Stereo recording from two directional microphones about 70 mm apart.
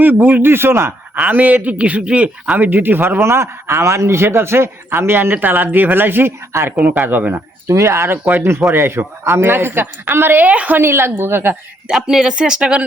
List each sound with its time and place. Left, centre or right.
0.0 s a man's voice: right
1.2 s a man's voice: right
6.7 s speech: right
7.7 s a man's voice: right
10.8 s a man's voice: right
11.9 s speech: centre